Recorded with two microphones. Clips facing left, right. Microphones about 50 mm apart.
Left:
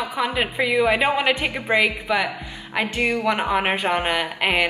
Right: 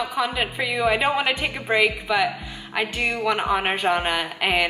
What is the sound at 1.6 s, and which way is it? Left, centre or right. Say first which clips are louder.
A woman's voice: even; centre.